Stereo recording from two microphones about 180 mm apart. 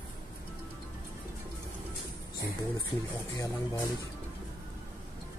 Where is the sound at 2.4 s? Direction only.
20° left (ahead or behind).